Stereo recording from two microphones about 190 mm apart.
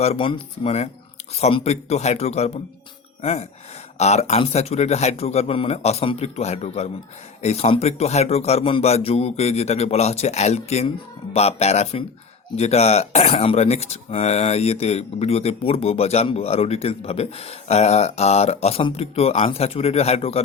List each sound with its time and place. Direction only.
0.0 s speech: 30° left (ahead or behind)